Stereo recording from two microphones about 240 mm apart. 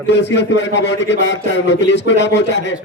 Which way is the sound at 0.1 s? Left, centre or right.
Left.